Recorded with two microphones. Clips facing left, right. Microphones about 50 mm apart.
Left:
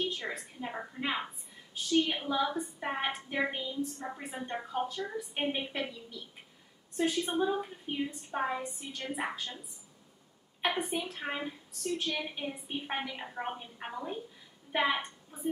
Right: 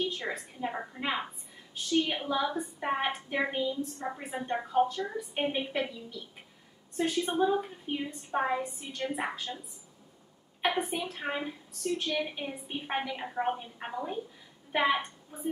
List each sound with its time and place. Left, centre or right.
0.0 s a woman's voice: centre
10.6 s a woman's voice: centre